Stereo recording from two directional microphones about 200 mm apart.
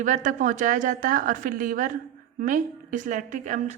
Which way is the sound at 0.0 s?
40° right (ahead or behind).